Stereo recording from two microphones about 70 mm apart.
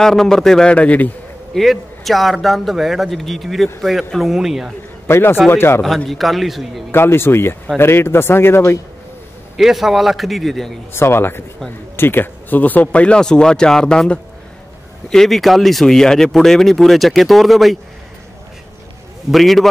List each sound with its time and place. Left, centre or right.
0.0 s speech: centre; by 1.1 s left
1.5 s speech: centre
5.0 s a man's voice: left
6.0 s speech: centre
6.9 s a man's voice: left
9.6 s speech: centre
10.9 s a man's voice: left; by 17.7 s centre
19.3 s speech: centre